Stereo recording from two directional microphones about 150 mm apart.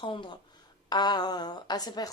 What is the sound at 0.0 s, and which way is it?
A woman's voice, 35° left (ahead or behind).